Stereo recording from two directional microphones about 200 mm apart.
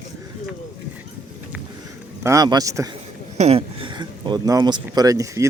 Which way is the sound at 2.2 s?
20° right (ahead or behind).